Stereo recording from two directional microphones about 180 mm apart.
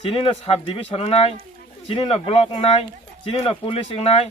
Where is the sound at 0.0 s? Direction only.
30° left (ahead or behind).